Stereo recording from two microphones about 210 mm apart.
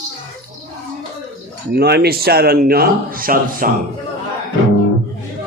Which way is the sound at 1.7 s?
50° right (ahead or behind).